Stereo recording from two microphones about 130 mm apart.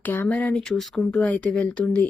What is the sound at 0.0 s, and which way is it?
Speech, 15° left (ahead or behind).